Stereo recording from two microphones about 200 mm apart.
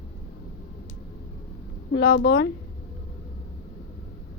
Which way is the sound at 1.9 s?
60° left (ahead or behind).